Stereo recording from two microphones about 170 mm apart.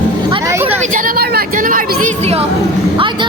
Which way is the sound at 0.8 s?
50° right (ahead or behind).